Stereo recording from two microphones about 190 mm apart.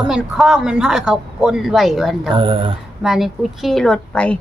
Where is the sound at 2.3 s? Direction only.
25° right (ahead or behind).